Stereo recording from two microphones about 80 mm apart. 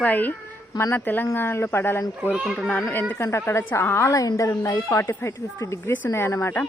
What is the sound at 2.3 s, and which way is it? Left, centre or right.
Speech, centre.